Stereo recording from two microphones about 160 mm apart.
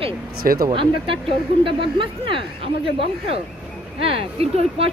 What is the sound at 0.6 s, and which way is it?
Speech, 35° right (ahead or behind).